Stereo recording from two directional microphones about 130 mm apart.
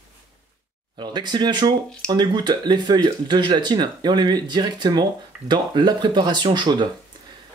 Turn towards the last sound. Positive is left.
turn(degrees=-35)  # may be behind; listen again after turning